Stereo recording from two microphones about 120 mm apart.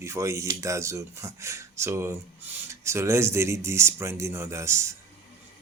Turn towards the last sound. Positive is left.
turn(degrees=-25)  # may be behind; listen again after turning